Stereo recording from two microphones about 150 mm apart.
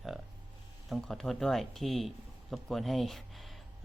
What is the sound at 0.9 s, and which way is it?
Speech, centre (ahead or behind).